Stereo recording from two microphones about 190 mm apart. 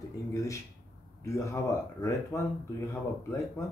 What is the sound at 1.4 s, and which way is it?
Speech, 15° left (ahead or behind).